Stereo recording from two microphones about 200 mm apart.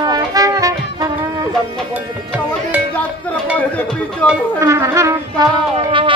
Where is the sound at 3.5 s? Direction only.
10° left (ahead or behind).